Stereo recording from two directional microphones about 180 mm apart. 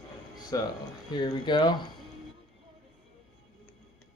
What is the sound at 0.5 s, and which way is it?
Speech, 20° left (ahead or behind).